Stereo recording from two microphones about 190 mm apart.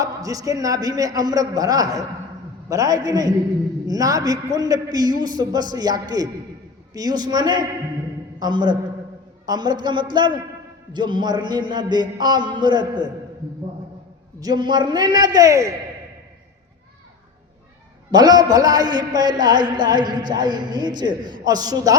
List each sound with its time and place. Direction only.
0.0 s a man's voice: 20° right (ahead or behind)
14.3 s a man's voice: 20° right (ahead or behind)
18.1 s a man's voice: 20° right (ahead or behind)